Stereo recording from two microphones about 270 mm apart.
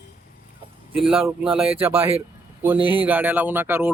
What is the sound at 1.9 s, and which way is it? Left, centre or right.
Speech, right.